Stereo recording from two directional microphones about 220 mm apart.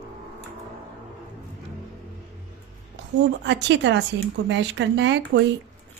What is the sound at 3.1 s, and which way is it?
Speech, 55° right (ahead or behind).